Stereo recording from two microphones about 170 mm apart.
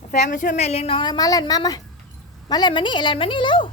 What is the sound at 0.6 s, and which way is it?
Speech, 35° left (ahead or behind).